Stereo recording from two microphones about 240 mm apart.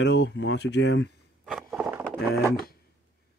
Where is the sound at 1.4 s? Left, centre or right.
Centre.